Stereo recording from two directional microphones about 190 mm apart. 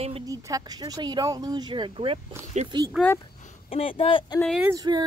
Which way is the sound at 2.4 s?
40° right (ahead or behind).